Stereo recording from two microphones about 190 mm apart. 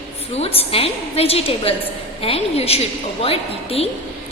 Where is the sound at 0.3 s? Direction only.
30° left (ahead or behind).